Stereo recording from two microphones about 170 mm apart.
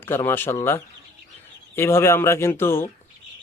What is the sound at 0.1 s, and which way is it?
Speech, 15° left (ahead or behind).